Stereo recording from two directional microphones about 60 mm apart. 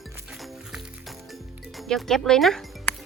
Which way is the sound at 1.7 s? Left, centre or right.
Centre.